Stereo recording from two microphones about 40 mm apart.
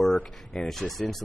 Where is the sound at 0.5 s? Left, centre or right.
Centre.